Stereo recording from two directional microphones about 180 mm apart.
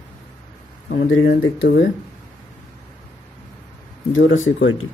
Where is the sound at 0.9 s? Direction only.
90° left.